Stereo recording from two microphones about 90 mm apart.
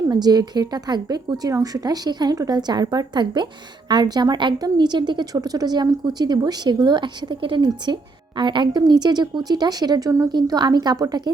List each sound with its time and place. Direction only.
0.1 s a woman's voice: 50° right (ahead or behind)